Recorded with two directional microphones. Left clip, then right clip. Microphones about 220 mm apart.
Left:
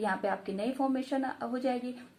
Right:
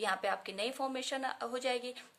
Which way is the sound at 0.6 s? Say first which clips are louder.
Left 4 dB; 35° right (ahead or behind).